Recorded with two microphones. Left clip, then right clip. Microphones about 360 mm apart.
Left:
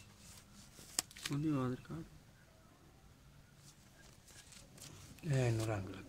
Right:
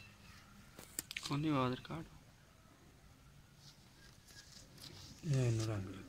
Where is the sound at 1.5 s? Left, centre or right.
Centre.